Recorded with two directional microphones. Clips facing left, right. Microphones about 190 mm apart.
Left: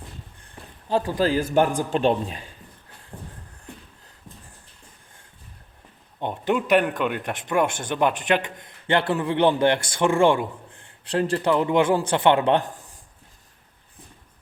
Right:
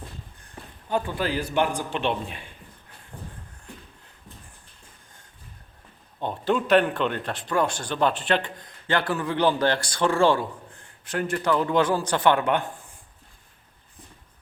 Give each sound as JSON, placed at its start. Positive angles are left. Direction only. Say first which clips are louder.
{"t": 0.4, "sound": "speech", "louder": "left 3 dB", "side_deg": 30}
{"t": 3.1, "sound": "shuffle", "louder": "left 1 dB", "side_deg": 15}
{"t": 6.1, "sound": "speech", "louder": "left 1 dB", "side_deg": 20}
{"t": 11.1, "sound": "speech", "louder": "left 3 dB", "side_deg": 30}